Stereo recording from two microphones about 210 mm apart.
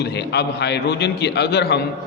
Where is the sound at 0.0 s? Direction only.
55° left (ahead or behind).